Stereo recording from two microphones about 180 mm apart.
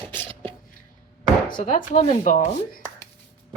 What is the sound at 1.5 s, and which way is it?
Speech, 45° left (ahead or behind).